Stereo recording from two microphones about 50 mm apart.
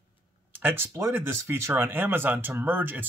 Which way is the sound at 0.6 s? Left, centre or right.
Right.